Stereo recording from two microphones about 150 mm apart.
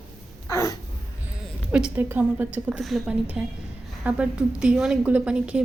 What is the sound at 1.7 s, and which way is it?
A woman's voice, 10° right (ahead or behind).